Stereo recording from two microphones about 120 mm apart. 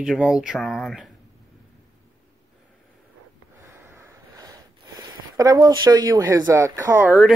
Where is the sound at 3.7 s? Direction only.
20° right (ahead or behind).